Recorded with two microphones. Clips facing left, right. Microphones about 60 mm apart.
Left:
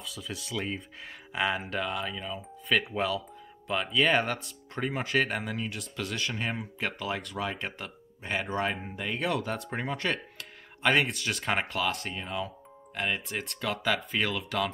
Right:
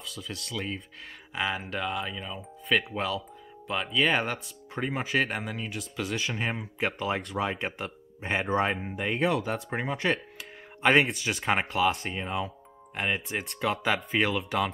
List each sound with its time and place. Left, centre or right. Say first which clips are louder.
0.0 s speech: even; centre
7.0 s speech: right 4 dB; right
9.2 s speech: right 3 dB; centre
12.2 s speech: right 3 dB; right